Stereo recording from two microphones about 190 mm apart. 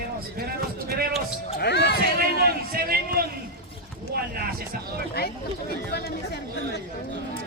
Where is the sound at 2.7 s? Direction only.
50° right (ahead or behind).